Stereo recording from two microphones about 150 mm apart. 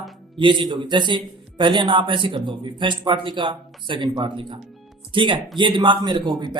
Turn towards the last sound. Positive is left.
turn(degrees=-30)  # may be behind; listen again after turning